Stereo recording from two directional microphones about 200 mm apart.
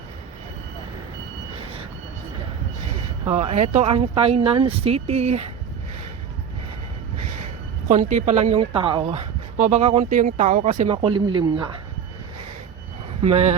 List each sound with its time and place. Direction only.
3.2 s speech: 35° right (ahead or behind)
7.9 s speech: 40° right (ahead or behind)
10.9 s speech: 25° right (ahead or behind)
13.2 s speech: 35° right (ahead or behind)